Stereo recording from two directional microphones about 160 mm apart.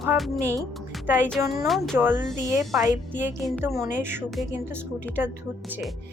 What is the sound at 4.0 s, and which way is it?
A woman's voice, 15° right (ahead or behind).